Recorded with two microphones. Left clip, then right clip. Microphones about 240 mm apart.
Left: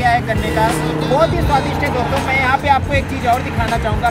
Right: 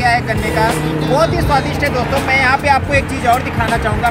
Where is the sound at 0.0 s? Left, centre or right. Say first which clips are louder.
Right 1 dB; centre.